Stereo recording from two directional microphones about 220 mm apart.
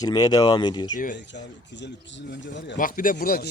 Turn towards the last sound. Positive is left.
turn(degrees=45)  # may be behind; listen again after turning